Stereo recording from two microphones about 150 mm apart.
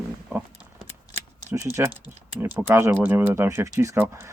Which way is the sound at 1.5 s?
20° right (ahead or behind).